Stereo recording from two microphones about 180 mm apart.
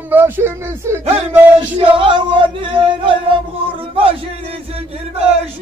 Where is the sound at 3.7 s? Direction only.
30° right (ahead or behind).